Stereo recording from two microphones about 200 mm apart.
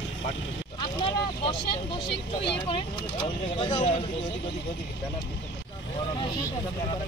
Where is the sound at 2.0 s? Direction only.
25° left (ahead or behind).